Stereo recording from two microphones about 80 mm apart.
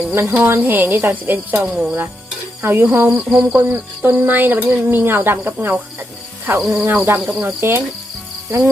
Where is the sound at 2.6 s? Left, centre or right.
Right.